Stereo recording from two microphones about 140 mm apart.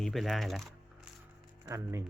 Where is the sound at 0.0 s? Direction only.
Centre (ahead or behind).